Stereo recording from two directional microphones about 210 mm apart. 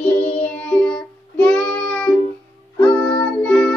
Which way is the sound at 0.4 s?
5° left (ahead or behind).